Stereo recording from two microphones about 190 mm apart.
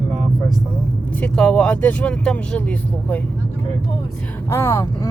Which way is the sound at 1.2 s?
5° left (ahead or behind).